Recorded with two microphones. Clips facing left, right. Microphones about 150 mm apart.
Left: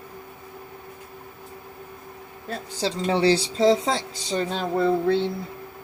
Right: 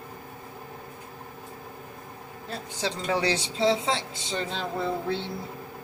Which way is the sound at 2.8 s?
30° left (ahead or behind).